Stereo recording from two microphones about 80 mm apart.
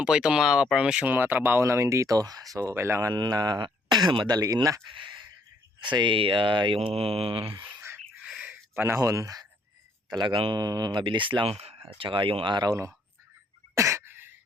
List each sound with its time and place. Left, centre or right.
0.0 s speech: centre
1.1 s speech: right
2.7 s speech: right
3.1 s speech: right
4.4 s speech: right
4.9 s a sound: right
5.8 s speech: right
8.3 s a sound: centre
8.7 s speech: right
9.0 s speech: right
10.1 s speech: right
12.0 s speech: right
12.6 s speech: right
13.7 s cough: right